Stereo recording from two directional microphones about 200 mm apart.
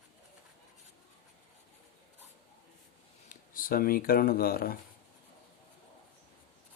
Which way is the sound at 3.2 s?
45° left (ahead or behind).